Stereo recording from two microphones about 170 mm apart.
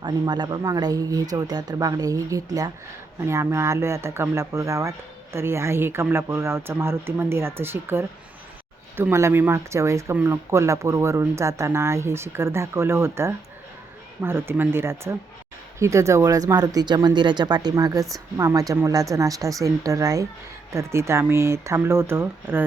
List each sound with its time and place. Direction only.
0.0 s speech: 25° right (ahead or behind)